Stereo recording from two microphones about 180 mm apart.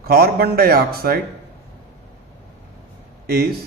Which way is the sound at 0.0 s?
60° right (ahead or behind).